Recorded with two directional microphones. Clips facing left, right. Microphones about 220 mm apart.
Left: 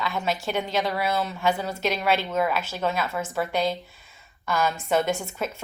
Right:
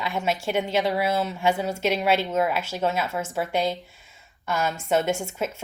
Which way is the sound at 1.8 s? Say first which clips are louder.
Right 2 dB; 10° right (ahead or behind).